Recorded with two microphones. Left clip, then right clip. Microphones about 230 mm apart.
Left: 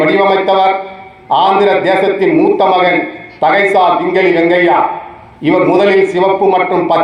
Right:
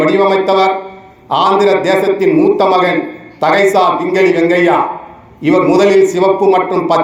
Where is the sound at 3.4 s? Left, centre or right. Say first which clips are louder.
Left 1 dB; right.